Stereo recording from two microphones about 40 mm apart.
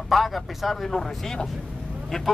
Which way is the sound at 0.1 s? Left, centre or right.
Centre.